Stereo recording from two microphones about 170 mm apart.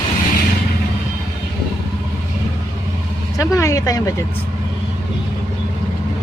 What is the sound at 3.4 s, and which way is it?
Speech, 20° left (ahead or behind).